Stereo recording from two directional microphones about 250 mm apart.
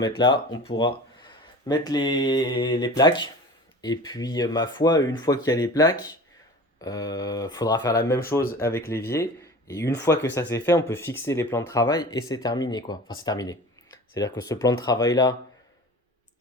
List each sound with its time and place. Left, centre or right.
0.0 s speech: centre